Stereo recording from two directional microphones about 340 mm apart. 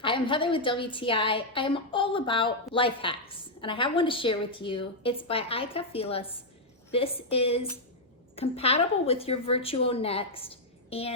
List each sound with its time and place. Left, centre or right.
0.0 s a woman's voice: centre